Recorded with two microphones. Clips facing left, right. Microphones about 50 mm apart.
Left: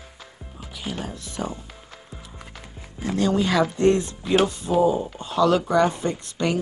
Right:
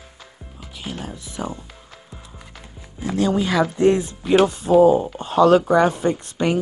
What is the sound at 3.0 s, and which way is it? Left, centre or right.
Speech, centre.